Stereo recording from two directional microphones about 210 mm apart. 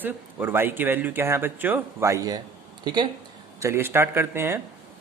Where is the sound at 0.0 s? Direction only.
10° right (ahead or behind).